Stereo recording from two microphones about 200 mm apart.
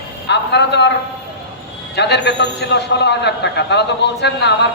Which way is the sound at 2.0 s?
60° left (ahead or behind).